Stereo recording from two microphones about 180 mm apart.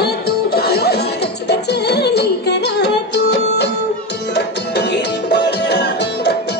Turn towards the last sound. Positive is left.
turn(degrees=70)  # may be behind; listen again after turning